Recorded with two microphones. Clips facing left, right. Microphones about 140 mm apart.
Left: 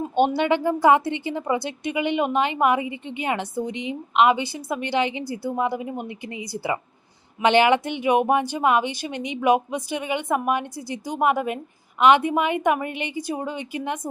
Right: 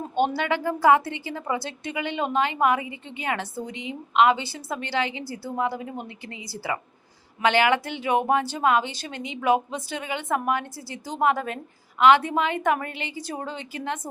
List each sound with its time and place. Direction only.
0.2 s a woman's voice: 20° left (ahead or behind)